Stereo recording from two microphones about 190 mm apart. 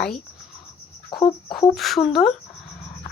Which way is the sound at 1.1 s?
25° left (ahead or behind).